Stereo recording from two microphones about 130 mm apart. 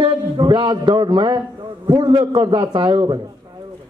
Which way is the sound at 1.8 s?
30° right (ahead or behind).